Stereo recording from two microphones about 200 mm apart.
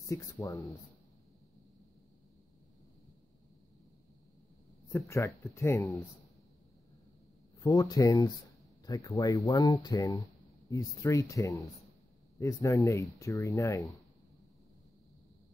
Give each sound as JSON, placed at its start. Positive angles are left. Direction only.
{"t": 0.0, "sound": "speech", "side_deg": 15}
{"t": 4.9, "sound": "speech", "side_deg": 15}
{"t": 7.6, "sound": "speech", "side_deg": 20}